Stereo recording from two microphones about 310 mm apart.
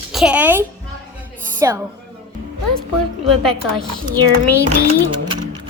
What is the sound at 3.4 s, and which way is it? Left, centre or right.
Speech, centre.